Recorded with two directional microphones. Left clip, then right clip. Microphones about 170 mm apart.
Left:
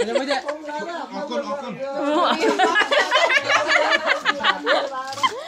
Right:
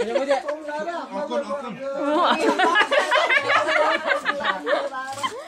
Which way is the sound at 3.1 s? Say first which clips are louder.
Left 1 dB; centre (ahead or behind).